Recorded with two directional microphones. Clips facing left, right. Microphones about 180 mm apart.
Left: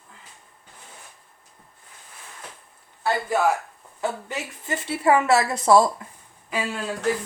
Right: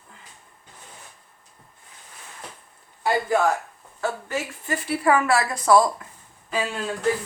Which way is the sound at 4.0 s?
20° left (ahead or behind).